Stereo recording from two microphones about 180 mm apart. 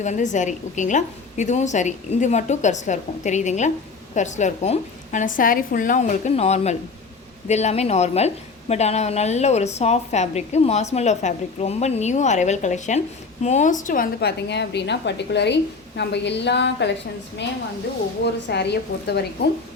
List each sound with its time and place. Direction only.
0.0 s a woman's voice: 40° left (ahead or behind); by 16.9 s 70° left (ahead or behind)
18.5 s a woman's voice: 65° left (ahead or behind)